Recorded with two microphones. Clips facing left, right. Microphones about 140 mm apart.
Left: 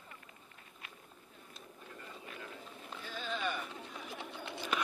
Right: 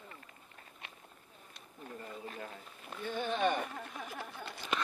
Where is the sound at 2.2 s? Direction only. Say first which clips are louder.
Right 4 dB; 35° right (ahead or behind).